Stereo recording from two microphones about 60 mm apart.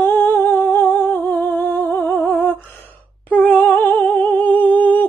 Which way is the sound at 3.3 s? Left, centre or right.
Left.